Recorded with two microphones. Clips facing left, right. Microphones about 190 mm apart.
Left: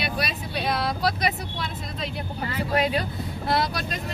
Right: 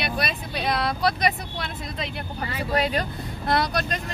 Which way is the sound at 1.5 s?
60° right (ahead or behind).